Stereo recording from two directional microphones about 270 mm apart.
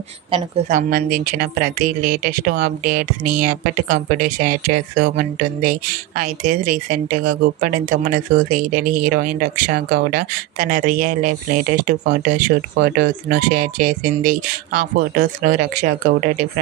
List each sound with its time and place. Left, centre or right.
0.3 s a woman's voice: centre
0.7 s speech: right